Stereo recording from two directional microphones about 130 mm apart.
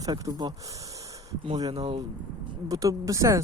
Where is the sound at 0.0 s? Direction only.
30° right (ahead or behind).